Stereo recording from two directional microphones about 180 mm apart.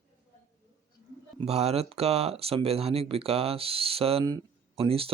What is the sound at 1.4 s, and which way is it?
Speech, 35° right (ahead or behind).